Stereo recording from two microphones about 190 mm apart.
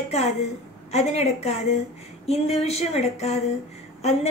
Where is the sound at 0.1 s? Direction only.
35° left (ahead or behind).